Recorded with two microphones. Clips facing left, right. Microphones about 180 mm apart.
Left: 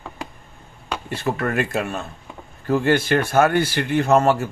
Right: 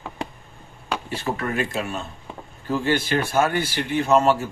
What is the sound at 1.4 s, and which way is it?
Speech, 60° left (ahead or behind).